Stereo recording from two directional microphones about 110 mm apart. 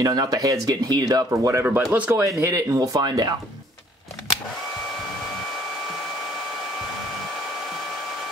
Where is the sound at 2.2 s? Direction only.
30° right (ahead or behind).